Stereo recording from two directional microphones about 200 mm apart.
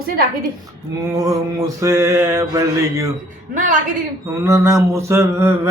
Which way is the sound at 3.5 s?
40° right (ahead or behind).